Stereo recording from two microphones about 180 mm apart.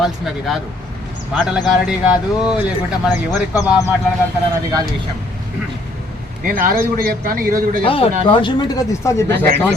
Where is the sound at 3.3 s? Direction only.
20° left (ahead or behind).